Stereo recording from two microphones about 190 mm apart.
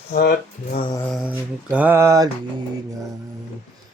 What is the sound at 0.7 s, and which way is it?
Mantra, 30° left (ahead or behind).